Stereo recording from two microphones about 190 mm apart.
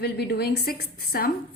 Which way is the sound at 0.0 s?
55° left (ahead or behind).